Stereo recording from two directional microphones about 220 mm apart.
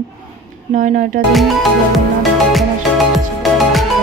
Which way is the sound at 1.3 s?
Centre (ahead or behind).